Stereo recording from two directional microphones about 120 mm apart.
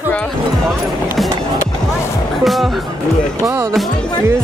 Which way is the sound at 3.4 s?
25° right (ahead or behind).